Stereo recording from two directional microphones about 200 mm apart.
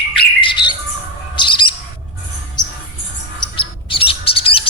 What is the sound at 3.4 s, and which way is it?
Chirp, 25° left (ahead or behind).